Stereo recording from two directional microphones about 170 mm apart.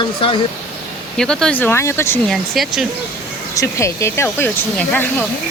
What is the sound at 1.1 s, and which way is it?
Speech, 5° left (ahead or behind).